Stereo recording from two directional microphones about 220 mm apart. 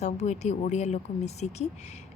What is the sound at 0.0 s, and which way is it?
Speech, 30° left (ahead or behind).